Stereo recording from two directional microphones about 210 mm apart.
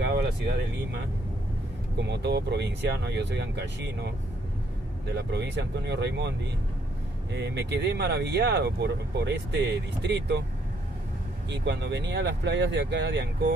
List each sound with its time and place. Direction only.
0.0 s speech: 55° right (ahead or behind)
5.1 s speech: 55° right (ahead or behind)
7.3 s speech: 55° right (ahead or behind)
11.5 s speech: 55° right (ahead or behind)